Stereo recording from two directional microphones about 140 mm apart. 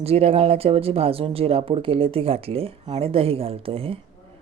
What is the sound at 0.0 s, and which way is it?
Speech, 45° right (ahead or behind).